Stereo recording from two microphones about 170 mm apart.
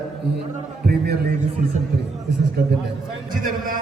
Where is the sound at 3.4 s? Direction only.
55° right (ahead or behind).